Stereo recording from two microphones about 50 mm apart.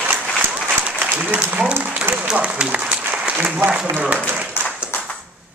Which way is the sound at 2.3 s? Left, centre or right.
Right.